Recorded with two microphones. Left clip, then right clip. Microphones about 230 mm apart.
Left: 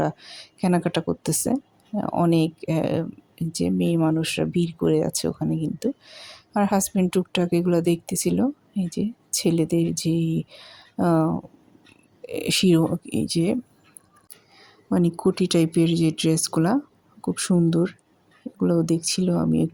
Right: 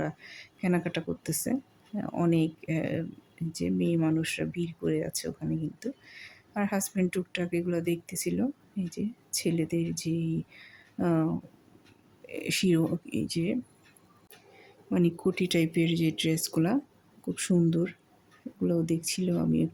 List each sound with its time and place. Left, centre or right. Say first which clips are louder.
0.0 s speech: left 9 dB; centre
14.8 s speech: left 6 dB; centre